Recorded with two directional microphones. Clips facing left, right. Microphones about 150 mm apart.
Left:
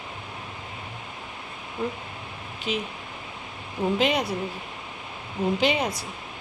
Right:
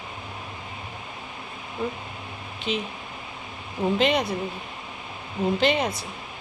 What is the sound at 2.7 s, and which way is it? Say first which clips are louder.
Speech: right 1 dB; 5° left (ahead or behind).